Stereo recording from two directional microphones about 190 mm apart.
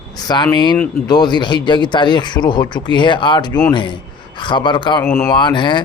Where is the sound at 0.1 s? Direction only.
20° left (ahead or behind).